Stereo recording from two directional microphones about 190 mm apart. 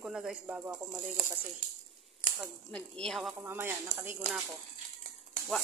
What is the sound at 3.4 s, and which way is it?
Speech, 10° right (ahead or behind).